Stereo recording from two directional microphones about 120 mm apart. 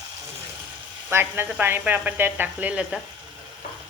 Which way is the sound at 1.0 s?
20° right (ahead or behind).